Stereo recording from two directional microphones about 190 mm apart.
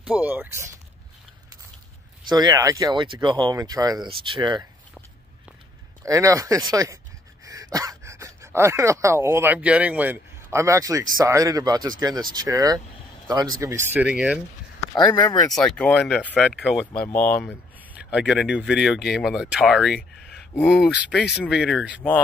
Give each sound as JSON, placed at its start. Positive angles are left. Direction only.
{"t": 0.0, "sound": "speech", "side_deg": -10}
{"t": 2.2, "sound": "speech", "side_deg": -20}
{"t": 6.0, "sound": "speech", "side_deg": -15}
{"t": 15.1, "sound": "speech", "side_deg": 20}
{"t": 15.5, "sound": "speech", "side_deg": 5}
{"t": 17.1, "sound": "speech", "side_deg": 10}
{"t": 17.9, "sound": "speech", "side_deg": -5}
{"t": 20.2, "sound": "a sound", "side_deg": 5}
{"t": 21.5, "sound": "speech", "side_deg": 0}